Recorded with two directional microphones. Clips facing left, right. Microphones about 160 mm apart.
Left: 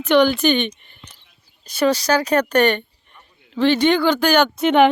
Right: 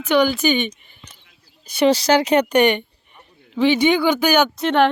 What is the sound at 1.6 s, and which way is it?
Speech, 15° right (ahead or behind).